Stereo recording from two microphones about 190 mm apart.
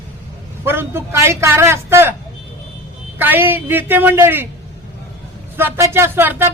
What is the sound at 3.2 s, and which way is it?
A man's voice, 10° right (ahead or behind).